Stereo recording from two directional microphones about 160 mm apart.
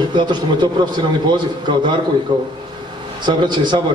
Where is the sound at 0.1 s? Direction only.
25° right (ahead or behind).